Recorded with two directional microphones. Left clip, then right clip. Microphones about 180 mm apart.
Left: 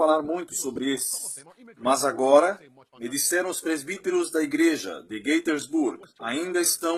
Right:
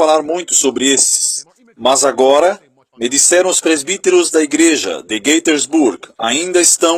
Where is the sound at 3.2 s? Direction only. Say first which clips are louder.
Right 14 dB; 40° right (ahead or behind).